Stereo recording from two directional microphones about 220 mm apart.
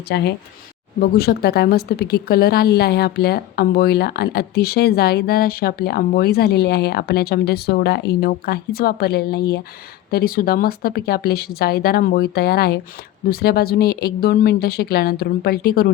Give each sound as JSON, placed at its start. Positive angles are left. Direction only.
{"t": 0.1, "sound": "a woman's voice", "side_deg": 50}